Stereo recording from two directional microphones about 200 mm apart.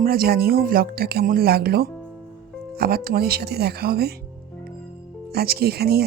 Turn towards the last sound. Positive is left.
turn(degrees=-50)  # may be behind; listen again after turning